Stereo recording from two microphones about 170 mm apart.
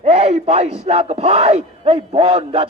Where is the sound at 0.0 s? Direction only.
35° right (ahead or behind).